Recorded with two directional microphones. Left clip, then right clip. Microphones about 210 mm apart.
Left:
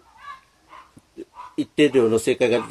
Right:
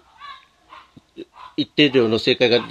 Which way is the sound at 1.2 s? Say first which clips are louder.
Right 2 dB; 30° right (ahead or behind).